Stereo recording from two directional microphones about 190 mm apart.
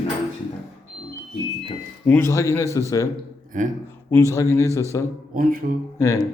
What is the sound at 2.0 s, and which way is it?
A man's voice, 10° left (ahead or behind).